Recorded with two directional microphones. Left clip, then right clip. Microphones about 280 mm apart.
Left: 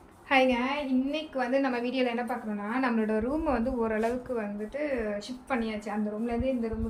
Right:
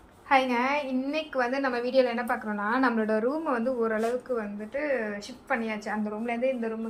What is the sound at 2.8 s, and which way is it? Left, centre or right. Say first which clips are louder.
A woman's voice: right 1 dB; centre.